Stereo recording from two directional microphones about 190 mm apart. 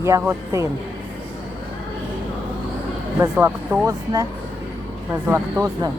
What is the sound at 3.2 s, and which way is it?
Speech, 10° right (ahead or behind).